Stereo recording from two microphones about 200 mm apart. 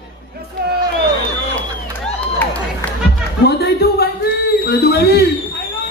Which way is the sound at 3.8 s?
55° left (ahead or behind).